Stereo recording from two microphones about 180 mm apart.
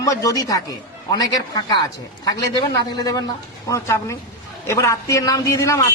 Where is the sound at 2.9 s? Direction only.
20° left (ahead or behind).